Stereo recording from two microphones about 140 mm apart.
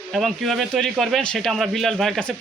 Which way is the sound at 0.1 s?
Centre (ahead or behind).